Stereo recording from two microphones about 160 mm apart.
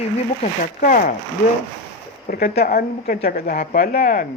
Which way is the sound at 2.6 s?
65° left (ahead or behind).